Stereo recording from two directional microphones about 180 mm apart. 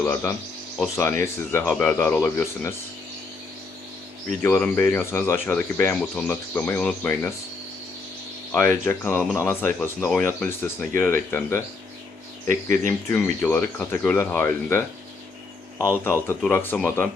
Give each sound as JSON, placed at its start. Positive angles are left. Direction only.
{"t": 0.0, "sound": "speech", "side_deg": 10}
{"t": 4.4, "sound": "speech", "side_deg": 15}
{"t": 8.5, "sound": "speech", "side_deg": 10}
{"t": 12.5, "sound": "speech", "side_deg": -45}
{"t": 13.4, "sound": "speech", "side_deg": 15}
{"t": 16.0, "sound": "speech", "side_deg": 15}